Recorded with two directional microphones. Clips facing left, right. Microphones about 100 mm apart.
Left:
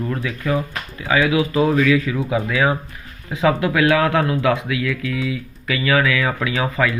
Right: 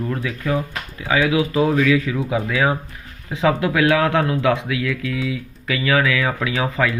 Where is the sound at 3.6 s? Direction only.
20° right (ahead or behind).